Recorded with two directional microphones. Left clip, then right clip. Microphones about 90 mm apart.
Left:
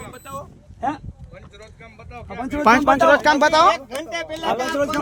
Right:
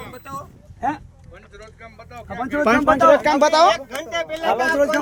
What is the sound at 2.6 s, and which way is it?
Speech, 90° left.